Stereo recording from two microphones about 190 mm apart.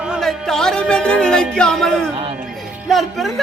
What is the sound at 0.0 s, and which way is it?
Music, centre (ahead or behind).